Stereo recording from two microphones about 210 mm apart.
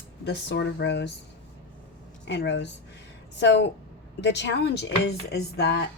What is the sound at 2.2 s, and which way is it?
Speech, 55° left (ahead or behind).